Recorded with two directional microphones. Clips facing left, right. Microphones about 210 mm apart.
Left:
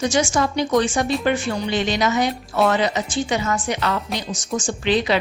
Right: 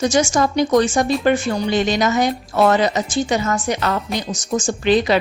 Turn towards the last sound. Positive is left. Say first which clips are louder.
# right 4 dB
turn(degrees=-45)  # may be behind; listen again after turning